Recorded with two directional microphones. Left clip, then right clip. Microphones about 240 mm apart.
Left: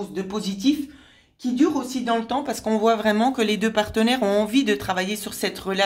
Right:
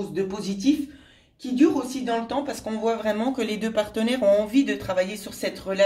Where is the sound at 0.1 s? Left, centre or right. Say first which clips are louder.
Right 1 dB; left.